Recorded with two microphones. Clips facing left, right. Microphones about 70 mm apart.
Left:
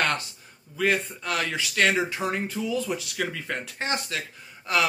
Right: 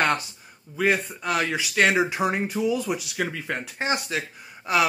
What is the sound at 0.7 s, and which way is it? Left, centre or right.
Speech, centre.